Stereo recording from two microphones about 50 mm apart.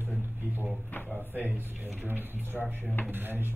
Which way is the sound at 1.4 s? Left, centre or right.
Right.